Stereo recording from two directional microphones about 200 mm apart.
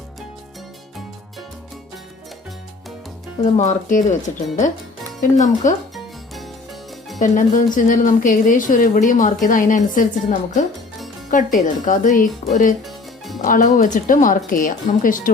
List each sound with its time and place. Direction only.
3.4 s a woman's voice: 35° left (ahead or behind)
5.9 s music: centre (ahead or behind)
7.2 s a woman's voice: 40° left (ahead or behind)